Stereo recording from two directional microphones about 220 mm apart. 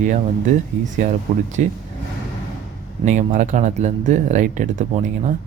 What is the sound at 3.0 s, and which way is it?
A man's voice, 35° right (ahead or behind).